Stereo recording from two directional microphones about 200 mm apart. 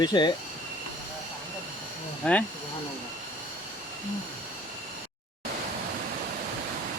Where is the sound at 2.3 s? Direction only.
5° left (ahead or behind).